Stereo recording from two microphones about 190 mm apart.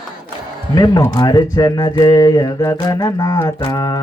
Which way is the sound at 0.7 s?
20° left (ahead or behind).